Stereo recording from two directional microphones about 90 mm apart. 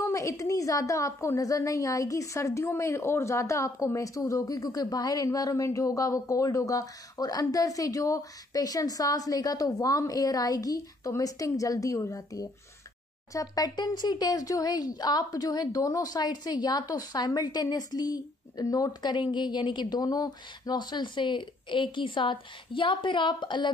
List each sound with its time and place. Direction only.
0.0 s a woman's voice: 35° left (ahead or behind); by 23.7 s 60° left (ahead or behind)